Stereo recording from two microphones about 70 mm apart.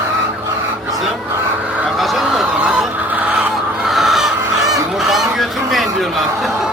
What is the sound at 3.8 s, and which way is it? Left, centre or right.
Chicken, centre.